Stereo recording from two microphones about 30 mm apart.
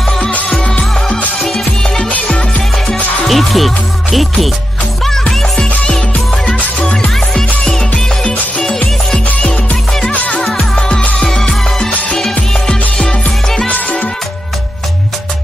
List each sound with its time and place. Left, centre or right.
1.4 s music: centre
3.3 s speech: centre
5.6 s music: left
8.2 s music: left
10.1 s music: left
11.1 s music: centre
12.6 s music: left
13.7 s music: left